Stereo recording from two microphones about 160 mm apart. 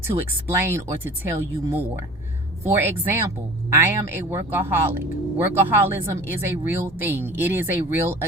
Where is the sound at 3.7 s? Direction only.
15° right (ahead or behind).